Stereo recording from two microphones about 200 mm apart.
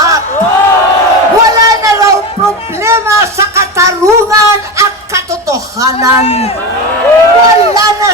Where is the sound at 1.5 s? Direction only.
15° right (ahead or behind).